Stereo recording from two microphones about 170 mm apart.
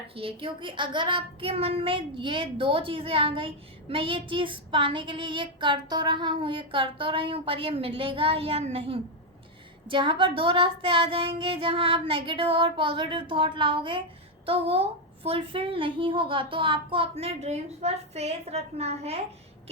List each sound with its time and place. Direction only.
0.2 s child singing: 30° right (ahead or behind)